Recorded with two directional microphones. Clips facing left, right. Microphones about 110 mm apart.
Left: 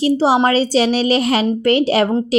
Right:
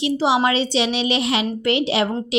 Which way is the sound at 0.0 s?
40° left (ahead or behind).